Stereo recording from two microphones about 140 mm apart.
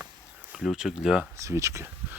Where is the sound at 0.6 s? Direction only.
5° right (ahead or behind).